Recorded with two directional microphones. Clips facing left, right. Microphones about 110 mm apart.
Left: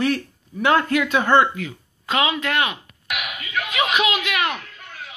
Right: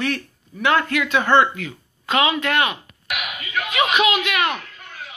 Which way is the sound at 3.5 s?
5° left (ahead or behind).